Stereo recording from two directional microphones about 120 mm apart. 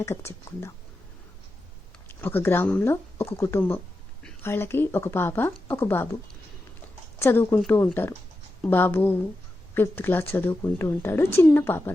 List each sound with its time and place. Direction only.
0.0 s speech: 20° left (ahead or behind)
2.0 s speech: 15° left (ahead or behind)
7.2 s speech: 20° left (ahead or behind)